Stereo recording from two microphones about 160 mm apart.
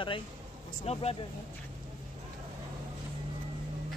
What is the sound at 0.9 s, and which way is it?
Speech, 40° left (ahead or behind).